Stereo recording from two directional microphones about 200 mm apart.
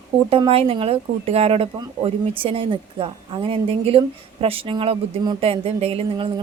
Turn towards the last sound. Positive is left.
turn(degrees=-25)  # may be behind; listen again after turning